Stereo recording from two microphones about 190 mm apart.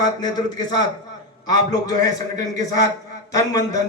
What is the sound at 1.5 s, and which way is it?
Speech, 20° left (ahead or behind).